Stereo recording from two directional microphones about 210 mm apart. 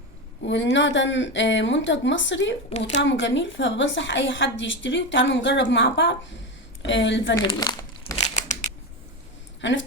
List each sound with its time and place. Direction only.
0.4 s a woman's voice: 60° left (ahead or behind)
7.3 s speech: 20° left (ahead or behind)
9.6 s speech: 60° left (ahead or behind)